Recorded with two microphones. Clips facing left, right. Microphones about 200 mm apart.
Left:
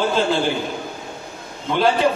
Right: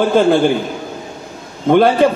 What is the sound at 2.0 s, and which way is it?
Speech, 55° right (ahead or behind).